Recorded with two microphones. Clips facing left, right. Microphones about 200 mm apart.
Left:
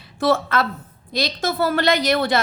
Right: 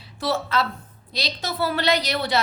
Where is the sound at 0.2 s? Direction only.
50° left (ahead or behind).